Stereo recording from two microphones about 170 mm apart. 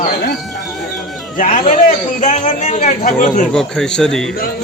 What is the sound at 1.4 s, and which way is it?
A man's voice, 45° left (ahead or behind).